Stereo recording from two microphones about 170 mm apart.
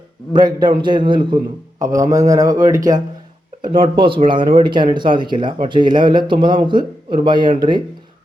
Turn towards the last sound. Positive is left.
turn(degrees=-25)  # may be behind; listen again after turning